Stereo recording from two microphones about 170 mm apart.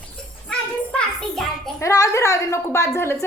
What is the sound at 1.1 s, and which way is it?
Speech, centre (ahead or behind).